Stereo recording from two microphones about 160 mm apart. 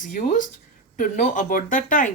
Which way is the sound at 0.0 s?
55° left (ahead or behind).